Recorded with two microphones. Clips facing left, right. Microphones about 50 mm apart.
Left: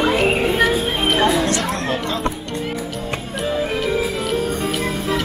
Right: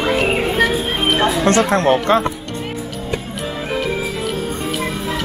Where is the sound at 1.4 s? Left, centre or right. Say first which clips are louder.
Right 6 dB; right.